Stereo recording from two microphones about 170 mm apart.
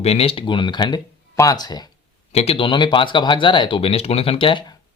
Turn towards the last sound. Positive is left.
turn(degrees=25)  # may be behind; listen again after turning